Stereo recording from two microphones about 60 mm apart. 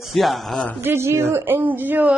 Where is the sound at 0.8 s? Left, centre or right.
Right.